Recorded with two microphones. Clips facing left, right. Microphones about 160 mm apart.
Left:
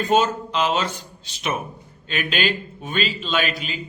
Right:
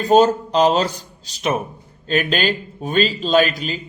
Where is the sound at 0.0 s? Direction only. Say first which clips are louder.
Right 6 dB; 40° right (ahead or behind).